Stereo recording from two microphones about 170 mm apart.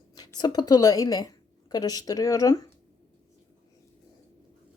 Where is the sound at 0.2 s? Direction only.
25° left (ahead or behind).